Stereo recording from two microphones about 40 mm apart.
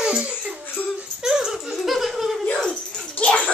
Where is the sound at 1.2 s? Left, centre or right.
Centre.